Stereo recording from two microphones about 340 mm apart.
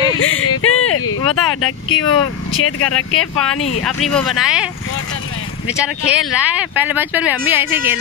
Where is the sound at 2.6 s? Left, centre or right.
Left.